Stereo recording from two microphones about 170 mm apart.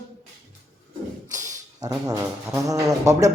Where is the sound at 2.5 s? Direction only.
20° right (ahead or behind).